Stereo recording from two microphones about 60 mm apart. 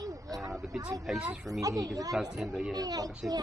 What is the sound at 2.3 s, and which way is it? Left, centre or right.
Speech, centre.